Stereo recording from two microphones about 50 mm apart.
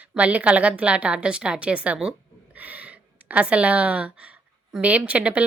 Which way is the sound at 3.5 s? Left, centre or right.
Right.